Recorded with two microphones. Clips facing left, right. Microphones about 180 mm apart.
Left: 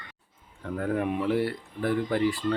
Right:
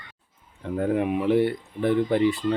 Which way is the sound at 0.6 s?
20° right (ahead or behind).